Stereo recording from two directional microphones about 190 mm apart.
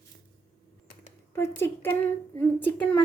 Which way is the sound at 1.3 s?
15° left (ahead or behind).